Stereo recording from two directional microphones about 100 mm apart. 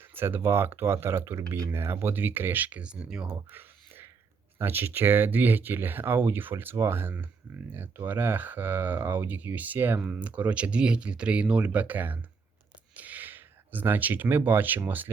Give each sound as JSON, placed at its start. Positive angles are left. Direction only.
{"t": 0.1, "sound": "speech", "side_deg": -25}
{"t": 3.2, "sound": "a sound", "side_deg": -20}
{"t": 4.5, "sound": "speech", "side_deg": -20}